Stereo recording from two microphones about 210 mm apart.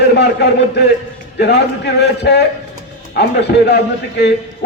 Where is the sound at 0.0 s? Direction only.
55° left (ahead or behind).